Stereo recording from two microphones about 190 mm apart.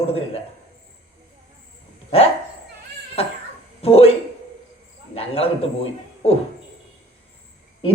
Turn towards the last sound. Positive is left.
turn(degrees=30)  # may be behind; listen again after turning